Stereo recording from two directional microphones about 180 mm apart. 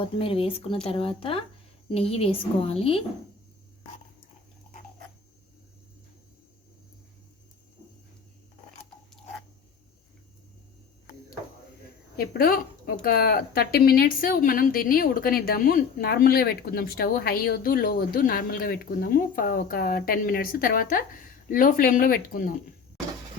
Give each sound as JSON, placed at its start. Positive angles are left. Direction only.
{"t": 0.2, "sound": "a woman's voice", "side_deg": 30}
{"t": 12.1, "sound": "speech", "side_deg": 55}